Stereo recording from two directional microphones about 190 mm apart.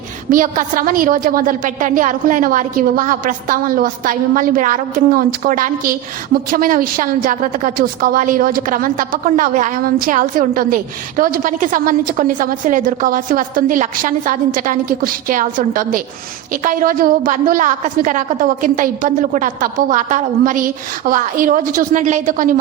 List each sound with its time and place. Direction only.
0.3 s a woman's voice: 45° right (ahead or behind)